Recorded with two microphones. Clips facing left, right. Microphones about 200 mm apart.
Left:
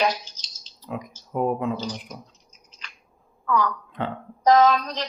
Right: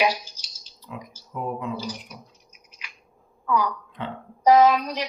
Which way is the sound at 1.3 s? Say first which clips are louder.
Left 6 dB; 50° left (ahead or behind).